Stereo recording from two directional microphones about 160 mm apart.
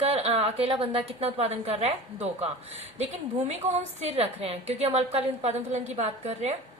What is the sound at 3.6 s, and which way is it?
A woman's voice, 45° right (ahead or behind).